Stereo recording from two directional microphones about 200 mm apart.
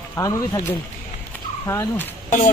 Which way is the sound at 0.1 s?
15° left (ahead or behind).